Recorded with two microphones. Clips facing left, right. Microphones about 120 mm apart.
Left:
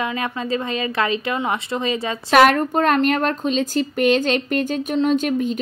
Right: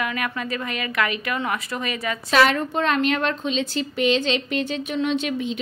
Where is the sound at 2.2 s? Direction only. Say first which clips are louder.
Left 5 dB; 55° left (ahead or behind).